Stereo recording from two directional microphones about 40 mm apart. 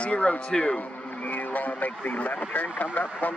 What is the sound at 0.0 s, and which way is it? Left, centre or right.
Speech, left.